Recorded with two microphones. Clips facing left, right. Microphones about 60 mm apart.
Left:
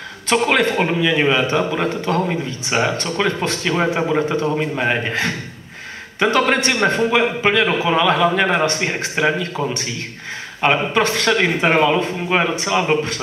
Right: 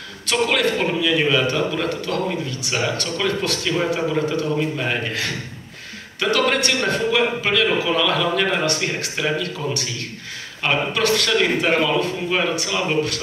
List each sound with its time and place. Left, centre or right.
0.3 s a man's voice: left